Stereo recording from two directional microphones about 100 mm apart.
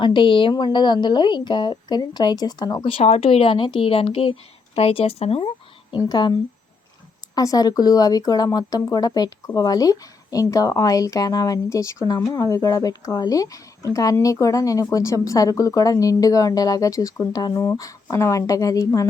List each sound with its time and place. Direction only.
0.0 s speech: 55° left (ahead or behind)
2.8 s speech: 70° left (ahead or behind)
6.0 s speech: 45° left (ahead or behind)